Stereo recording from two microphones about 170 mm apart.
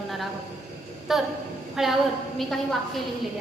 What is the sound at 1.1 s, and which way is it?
Speech, centre (ahead or behind).